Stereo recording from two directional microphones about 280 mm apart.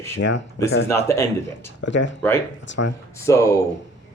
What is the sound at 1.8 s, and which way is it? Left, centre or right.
Speech, left.